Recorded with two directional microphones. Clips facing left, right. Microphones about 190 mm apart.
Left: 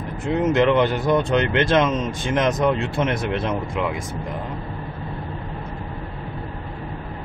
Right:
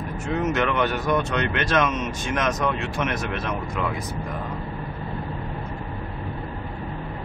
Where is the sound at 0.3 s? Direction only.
25° left (ahead or behind).